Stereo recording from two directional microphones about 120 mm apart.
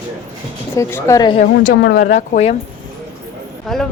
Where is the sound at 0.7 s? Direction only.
25° left (ahead or behind).